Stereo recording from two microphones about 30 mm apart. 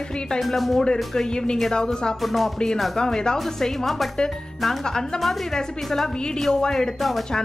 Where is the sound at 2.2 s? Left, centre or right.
Centre.